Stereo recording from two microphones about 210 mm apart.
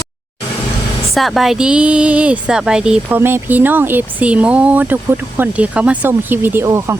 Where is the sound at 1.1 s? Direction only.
Centre (ahead or behind).